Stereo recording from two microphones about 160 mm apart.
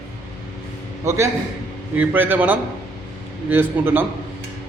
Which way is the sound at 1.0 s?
15° right (ahead or behind).